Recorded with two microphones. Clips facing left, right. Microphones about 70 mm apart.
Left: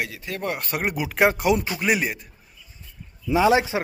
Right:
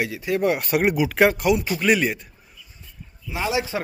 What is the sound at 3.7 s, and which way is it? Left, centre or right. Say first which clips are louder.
Speech: left 1 dB; left.